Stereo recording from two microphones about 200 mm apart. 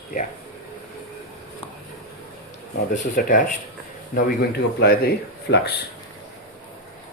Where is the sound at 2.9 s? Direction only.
45° left (ahead or behind).